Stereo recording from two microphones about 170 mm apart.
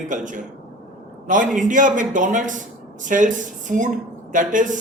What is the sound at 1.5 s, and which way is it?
A man's voice, 50° right (ahead or behind).